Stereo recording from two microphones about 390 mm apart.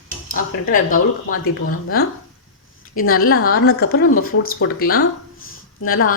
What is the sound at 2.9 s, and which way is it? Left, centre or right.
Speech, left.